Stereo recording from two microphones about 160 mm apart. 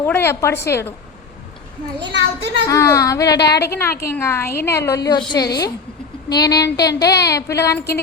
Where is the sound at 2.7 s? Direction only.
20° left (ahead or behind).